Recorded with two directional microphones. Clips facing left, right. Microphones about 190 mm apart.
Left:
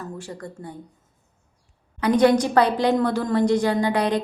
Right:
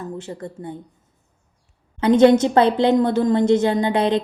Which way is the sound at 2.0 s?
25° right (ahead or behind).